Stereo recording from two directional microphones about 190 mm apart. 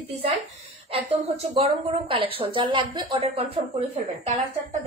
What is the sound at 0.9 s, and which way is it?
A woman's voice, 35° right (ahead or behind).